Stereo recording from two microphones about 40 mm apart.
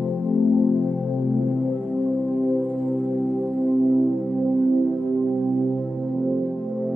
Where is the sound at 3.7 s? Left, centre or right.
Right.